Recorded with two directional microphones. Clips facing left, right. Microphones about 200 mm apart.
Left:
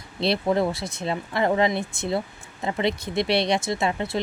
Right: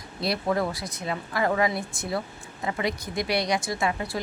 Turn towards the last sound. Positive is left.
turn(degrees=25)  # may be behind; listen again after turning